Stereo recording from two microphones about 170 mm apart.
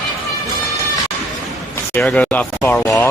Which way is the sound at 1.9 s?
10° left (ahead or behind).